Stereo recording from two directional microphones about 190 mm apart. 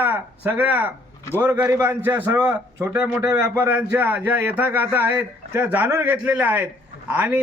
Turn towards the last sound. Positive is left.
turn(degrees=-5)  # may be behind; listen again after turning